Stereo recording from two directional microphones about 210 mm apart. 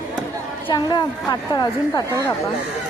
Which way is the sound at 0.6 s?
20° left (ahead or behind).